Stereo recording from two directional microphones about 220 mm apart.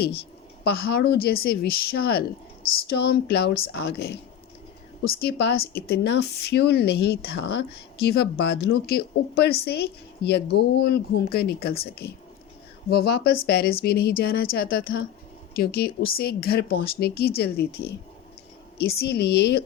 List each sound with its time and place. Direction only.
0.6 s a woman's voice: 45° left (ahead or behind)
12.9 s a woman's voice: 45° left (ahead or behind)